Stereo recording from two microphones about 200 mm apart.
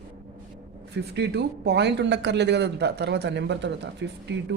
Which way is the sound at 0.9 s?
55° right (ahead or behind).